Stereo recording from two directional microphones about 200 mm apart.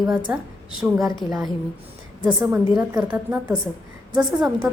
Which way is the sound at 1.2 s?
25° left (ahead or behind).